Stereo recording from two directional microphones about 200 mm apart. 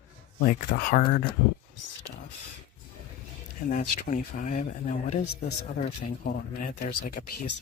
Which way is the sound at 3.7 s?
40° left (ahead or behind).